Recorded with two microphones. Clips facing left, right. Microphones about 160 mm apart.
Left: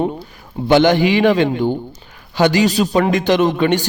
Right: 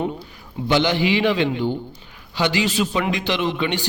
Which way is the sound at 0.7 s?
50° left (ahead or behind).